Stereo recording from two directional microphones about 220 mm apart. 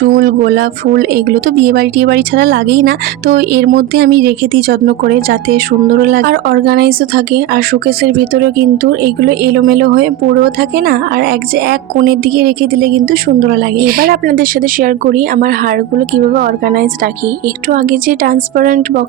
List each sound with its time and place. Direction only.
0.0 s a woman's voice: 40° right (ahead or behind)